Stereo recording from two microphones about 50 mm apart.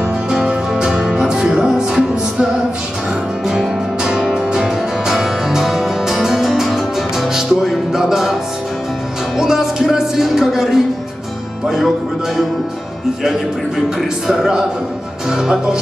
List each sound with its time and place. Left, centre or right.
0.3 s music: centre
9.4 s music: centre
14.2 s speech: centre